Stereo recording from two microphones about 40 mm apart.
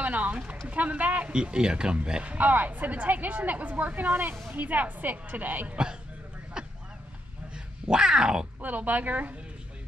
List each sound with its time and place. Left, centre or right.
0.0 s a sound: right
0.7 s speech: right
1.3 s speech: right
2.2 s speech: right
6.6 s a sound: centre
7.5 s speech: centre
8.5 s speech: right